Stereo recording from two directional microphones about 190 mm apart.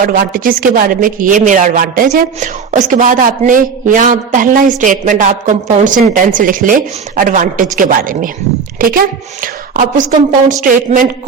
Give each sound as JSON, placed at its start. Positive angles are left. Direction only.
{"t": 0.0, "sound": "a man's voice", "side_deg": -50}